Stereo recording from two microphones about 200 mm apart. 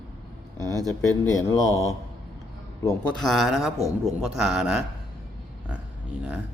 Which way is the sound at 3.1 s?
Centre (ahead or behind).